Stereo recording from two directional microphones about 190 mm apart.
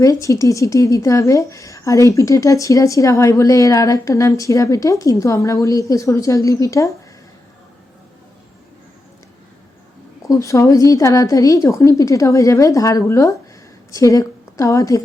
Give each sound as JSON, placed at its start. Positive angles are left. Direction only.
{"t": 0.0, "sound": "speech", "side_deg": 15}
{"t": 10.2, "sound": "a woman's voice", "side_deg": 15}